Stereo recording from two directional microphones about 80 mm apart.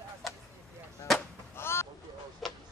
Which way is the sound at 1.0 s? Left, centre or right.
Left.